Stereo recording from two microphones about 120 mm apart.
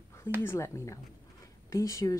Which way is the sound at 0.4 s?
20° left (ahead or behind).